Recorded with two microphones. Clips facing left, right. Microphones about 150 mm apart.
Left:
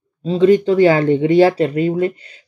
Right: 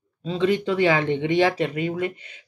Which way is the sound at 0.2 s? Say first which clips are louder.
Left 10 dB; 40° left (ahead or behind).